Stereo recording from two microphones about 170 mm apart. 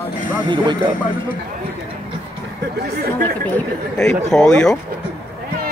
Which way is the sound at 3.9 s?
5° left (ahead or behind).